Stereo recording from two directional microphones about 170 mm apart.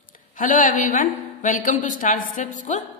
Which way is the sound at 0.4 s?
50° left (ahead or behind).